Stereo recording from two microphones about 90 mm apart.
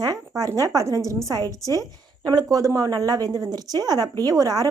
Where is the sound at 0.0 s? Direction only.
40° right (ahead or behind).